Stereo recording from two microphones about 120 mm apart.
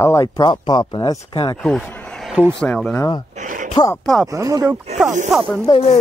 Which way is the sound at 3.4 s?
90° right.